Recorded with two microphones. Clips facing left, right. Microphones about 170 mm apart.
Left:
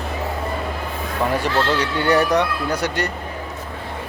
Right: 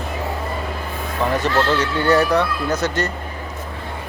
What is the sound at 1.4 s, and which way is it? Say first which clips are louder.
Speech: right 1 dB; 10° left (ahead or behind).